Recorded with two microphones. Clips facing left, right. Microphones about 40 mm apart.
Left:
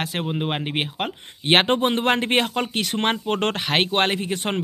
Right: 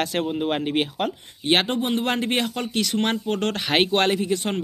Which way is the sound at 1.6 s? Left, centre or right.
Left.